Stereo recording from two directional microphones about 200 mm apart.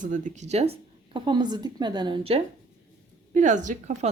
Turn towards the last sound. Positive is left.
turn(degrees=-35)  # may be behind; listen again after turning